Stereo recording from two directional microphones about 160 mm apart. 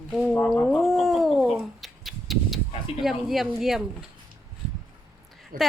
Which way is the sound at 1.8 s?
Centre (ahead or behind).